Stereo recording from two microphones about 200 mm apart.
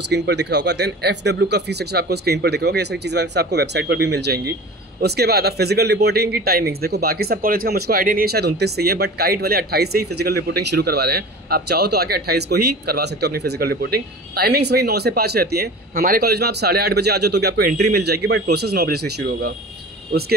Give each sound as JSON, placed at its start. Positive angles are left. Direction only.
{"t": 0.1, "sound": "speech", "side_deg": -60}